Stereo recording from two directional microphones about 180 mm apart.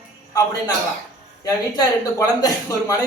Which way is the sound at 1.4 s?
20° left (ahead or behind).